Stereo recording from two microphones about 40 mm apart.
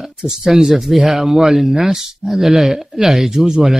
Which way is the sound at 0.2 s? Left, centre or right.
Centre.